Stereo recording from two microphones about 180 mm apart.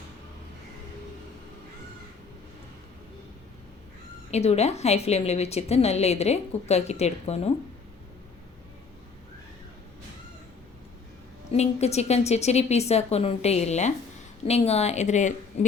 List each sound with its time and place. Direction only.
4.3 s a woman's voice: 35° left (ahead or behind)
11.5 s a woman's voice: 35° left (ahead or behind)